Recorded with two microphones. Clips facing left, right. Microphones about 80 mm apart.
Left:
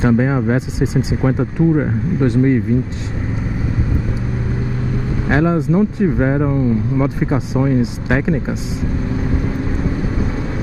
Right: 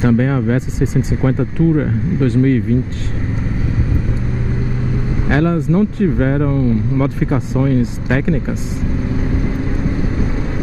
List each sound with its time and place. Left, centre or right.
0.0 s speech: centre
5.3 s speech: centre